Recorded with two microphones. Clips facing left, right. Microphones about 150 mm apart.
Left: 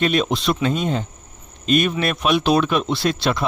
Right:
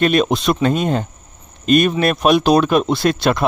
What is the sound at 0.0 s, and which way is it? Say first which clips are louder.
Speech: right 4 dB; 50° right (ahead or behind).